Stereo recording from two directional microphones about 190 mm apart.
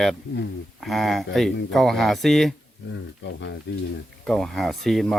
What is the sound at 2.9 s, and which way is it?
Speech, 70° left (ahead or behind).